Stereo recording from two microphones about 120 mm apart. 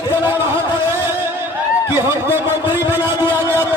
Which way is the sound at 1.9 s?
20° right (ahead or behind).